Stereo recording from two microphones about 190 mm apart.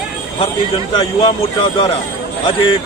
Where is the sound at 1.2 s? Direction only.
25° left (ahead or behind).